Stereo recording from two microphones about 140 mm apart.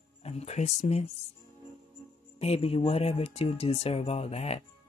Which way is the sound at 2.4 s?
45° left (ahead or behind).